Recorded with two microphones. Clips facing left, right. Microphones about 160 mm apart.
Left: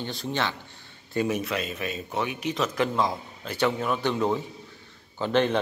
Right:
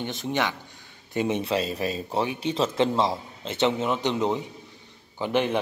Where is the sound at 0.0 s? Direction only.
20° right (ahead or behind).